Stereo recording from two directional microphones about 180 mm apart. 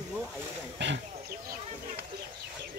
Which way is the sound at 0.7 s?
80° right.